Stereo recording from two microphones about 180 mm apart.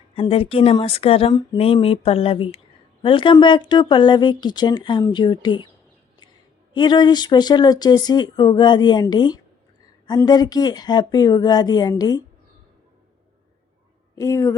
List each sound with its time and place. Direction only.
0.2 s speech: 30° left (ahead or behind)
6.7 s speech: 25° left (ahead or behind)
14.2 s speech: 15° left (ahead or behind)